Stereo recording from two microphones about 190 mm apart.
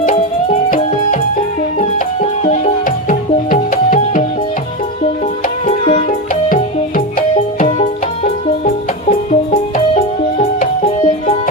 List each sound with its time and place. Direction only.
0.0 s music: 40° left (ahead or behind)
5.6 s music: 35° left (ahead or behind)
6.5 s music: 45° left (ahead or behind)
7.7 s music: 35° left (ahead or behind)